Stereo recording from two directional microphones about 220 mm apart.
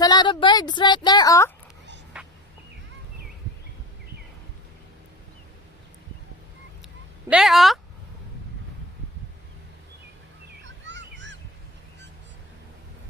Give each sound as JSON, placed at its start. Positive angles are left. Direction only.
{"t": 0.0, "sound": "a woman's voice", "side_deg": 20}
{"t": 2.1, "sound": "fowl", "side_deg": -5}
{"t": 7.3, "sound": "speech", "side_deg": 0}
{"t": 10.6, "sound": "a sound", "side_deg": -55}